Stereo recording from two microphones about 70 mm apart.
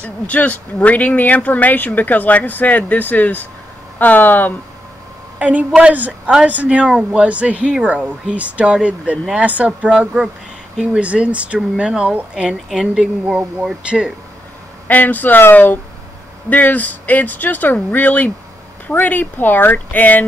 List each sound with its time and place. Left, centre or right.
0.0 s speech: left
5.4 s a woman's voice: right
14.9 s speech: left